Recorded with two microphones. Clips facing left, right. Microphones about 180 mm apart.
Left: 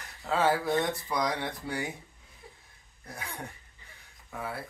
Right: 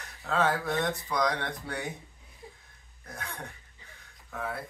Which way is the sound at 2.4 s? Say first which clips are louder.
Right 4 dB; 20° right (ahead or behind).